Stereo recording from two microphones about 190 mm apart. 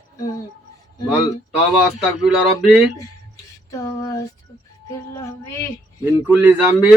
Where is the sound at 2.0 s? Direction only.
Centre (ahead or behind).